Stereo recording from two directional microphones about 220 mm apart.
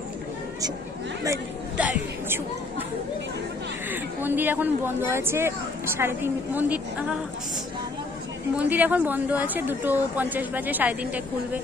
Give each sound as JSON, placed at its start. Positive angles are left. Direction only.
{"t": 1.2, "sound": "a woman's voice", "side_deg": -10}
{"t": 3.9, "sound": "a woman's voice", "side_deg": -10}
{"t": 8.5, "sound": "a woman's voice", "side_deg": -10}